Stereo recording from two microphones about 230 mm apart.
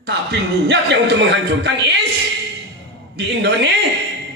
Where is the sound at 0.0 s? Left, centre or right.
Right.